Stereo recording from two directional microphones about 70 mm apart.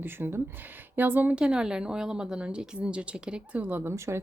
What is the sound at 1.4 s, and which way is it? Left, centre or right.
A woman's voice, centre.